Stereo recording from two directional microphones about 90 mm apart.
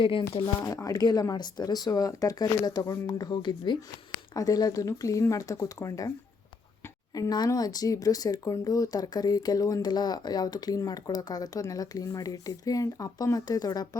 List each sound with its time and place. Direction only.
0.0 s speech: 70° left (ahead or behind)
0.6 s speech: 35° left (ahead or behind); by 3.8 s 60° left (ahead or behind)
4.4 s speech: 45° left (ahead or behind)
7.1 s speech: 45° left (ahead or behind)